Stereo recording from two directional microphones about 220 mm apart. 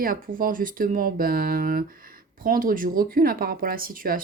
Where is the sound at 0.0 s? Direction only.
40° right (ahead or behind).